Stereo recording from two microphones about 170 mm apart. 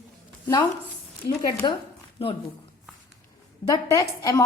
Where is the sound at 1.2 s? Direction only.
75° left (ahead or behind).